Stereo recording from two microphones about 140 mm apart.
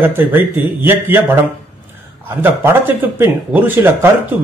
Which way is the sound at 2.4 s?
15° right (ahead or behind).